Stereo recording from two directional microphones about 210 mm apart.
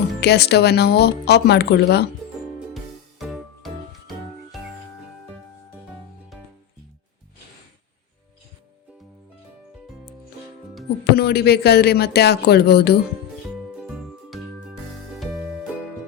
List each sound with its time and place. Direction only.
0.2 s speech: 50° left (ahead or behind)
2.7 s music: centre (ahead or behind)
11.1 s speech: 50° left (ahead or behind)
14.3 s music: centre (ahead or behind)